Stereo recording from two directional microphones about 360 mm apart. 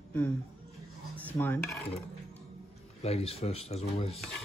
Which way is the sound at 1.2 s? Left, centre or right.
Centre.